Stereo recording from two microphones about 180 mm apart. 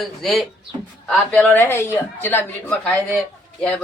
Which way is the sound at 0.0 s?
Centre (ahead or behind).